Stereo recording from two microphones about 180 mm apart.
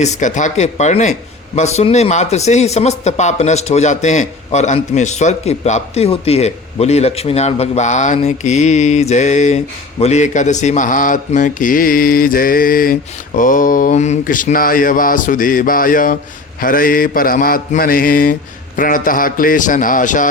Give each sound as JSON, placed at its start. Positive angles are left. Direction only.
{"t": 0.0, "sound": "speech", "side_deg": 40}